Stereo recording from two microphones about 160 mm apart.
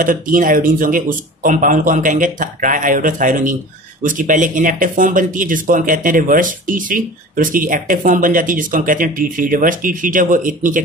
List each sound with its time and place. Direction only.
0.0 s speech: 55° right (ahead or behind)